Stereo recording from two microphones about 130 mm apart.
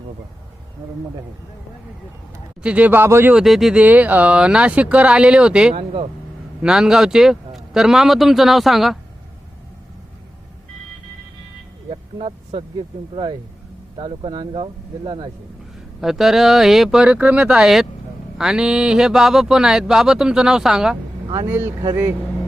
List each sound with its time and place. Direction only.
2.6 s speech: 10° right (ahead or behind)
3.3 s speech: centre (ahead or behind)
5.7 s speech: 50° right (ahead or behind)
6.6 s speech: 5° right (ahead or behind)
11.9 s speech: 45° right (ahead or behind)
16.0 s speech: 5° right (ahead or behind)
21.4 s speech: 20° right (ahead or behind)